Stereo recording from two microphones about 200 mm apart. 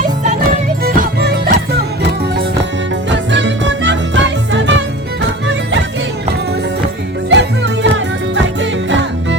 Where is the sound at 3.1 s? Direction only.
65° right (ahead or behind).